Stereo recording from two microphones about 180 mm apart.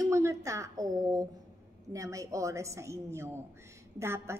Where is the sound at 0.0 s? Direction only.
15° right (ahead or behind).